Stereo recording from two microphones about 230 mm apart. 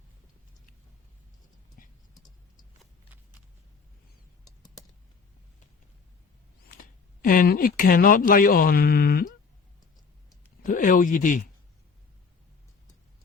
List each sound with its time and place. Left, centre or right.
1.8 s typing: left
6.7 s speech: left
10.6 s speech: left